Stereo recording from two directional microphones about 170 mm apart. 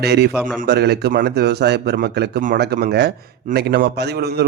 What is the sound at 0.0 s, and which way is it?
A man's voice, 75° right (ahead or behind).